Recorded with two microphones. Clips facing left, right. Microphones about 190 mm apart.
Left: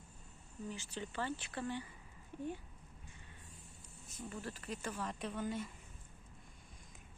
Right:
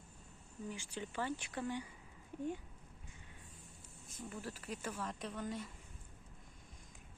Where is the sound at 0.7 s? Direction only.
10° right (ahead or behind).